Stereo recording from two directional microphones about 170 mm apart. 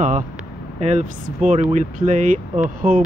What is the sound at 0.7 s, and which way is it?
Speech, 40° right (ahead or behind).